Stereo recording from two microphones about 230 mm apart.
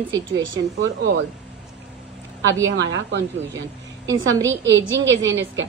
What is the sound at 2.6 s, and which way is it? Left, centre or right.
Speech, right.